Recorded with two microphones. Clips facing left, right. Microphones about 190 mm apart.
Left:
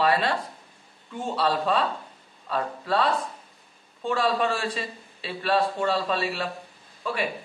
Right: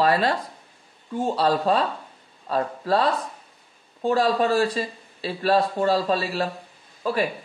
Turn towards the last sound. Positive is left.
turn(degrees=-40)  # may be behind; listen again after turning